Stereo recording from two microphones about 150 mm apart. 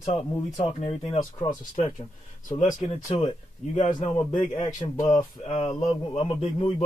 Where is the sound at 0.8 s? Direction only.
40° left (ahead or behind).